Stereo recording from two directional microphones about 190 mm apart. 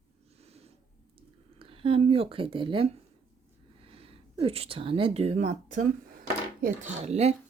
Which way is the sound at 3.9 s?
30° right (ahead or behind).